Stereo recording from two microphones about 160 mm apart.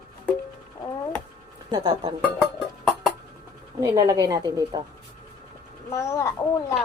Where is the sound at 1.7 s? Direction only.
25° right (ahead or behind).